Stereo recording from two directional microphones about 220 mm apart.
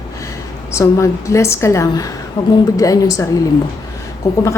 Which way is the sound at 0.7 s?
15° left (ahead or behind).